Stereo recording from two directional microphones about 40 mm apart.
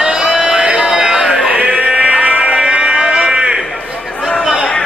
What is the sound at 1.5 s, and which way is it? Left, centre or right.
Sheep, right.